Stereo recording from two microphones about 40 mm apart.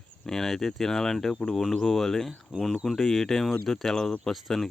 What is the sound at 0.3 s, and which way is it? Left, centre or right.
Speech, centre.